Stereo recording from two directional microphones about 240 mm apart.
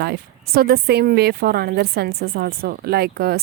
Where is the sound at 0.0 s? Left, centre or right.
Right.